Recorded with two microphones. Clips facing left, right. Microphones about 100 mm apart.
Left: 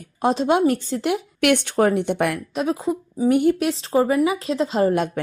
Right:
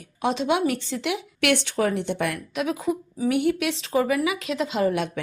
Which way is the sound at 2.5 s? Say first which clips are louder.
Left 3 dB; 35° left (ahead or behind).